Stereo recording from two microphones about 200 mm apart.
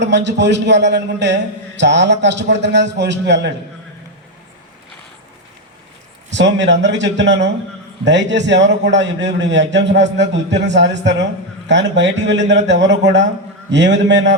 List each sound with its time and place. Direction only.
0.0 s a man's voice: 60° right (ahead or behind)
6.3 s a man's voice: 60° right (ahead or behind)